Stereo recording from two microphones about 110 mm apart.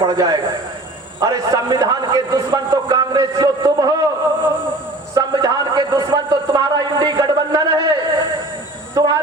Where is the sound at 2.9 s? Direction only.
40° right (ahead or behind).